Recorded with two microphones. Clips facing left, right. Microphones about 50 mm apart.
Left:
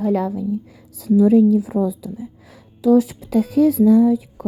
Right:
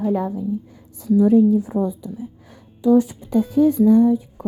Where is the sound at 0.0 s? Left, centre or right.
Left.